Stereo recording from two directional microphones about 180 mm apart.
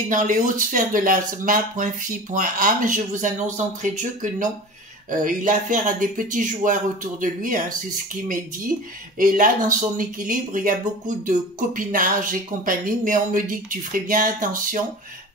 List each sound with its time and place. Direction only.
0.1 s speech: 45° right (ahead or behind)
9.2 s speech: 50° right (ahead or behind)